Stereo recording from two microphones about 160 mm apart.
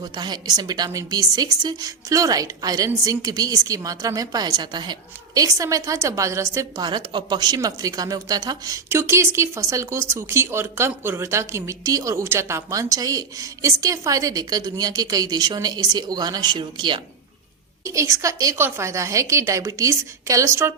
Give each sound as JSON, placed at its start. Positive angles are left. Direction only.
{"t": 0.0, "sound": "a woman's voice", "side_deg": -25}